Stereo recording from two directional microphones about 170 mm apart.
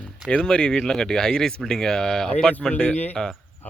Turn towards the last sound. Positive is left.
turn(degrees=5)  # may be behind; listen again after turning